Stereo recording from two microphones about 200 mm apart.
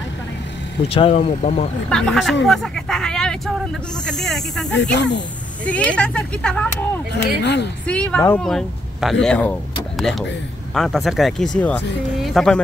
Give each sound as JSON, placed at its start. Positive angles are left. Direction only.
{"t": 0.8, "sound": "speech", "side_deg": 30}
{"t": 1.9, "sound": "speech", "side_deg": 5}
{"t": 4.9, "sound": "speech", "side_deg": 60}
{"t": 5.7, "sound": "speech", "side_deg": 5}
{"t": 7.2, "sound": "speech", "side_deg": 60}
{"t": 7.8, "sound": "speech", "side_deg": 5}